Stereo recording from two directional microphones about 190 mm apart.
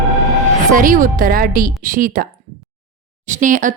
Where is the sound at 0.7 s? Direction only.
45° right (ahead or behind).